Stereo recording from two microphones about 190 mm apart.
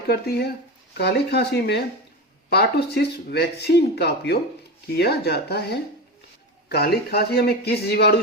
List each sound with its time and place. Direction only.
0.1 s speech: 55° left (ahead or behind)